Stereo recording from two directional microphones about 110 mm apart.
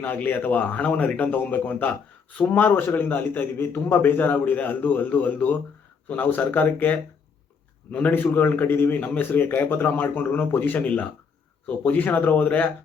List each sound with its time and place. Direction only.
0.0 s a man's voice: 15° left (ahead or behind)